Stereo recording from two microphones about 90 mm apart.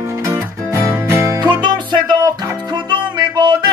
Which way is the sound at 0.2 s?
30° right (ahead or behind).